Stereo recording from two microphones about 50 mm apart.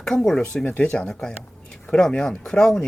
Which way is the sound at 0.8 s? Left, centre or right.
Left.